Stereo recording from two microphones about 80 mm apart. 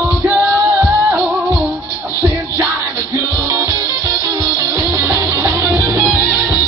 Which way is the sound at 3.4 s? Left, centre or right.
Right.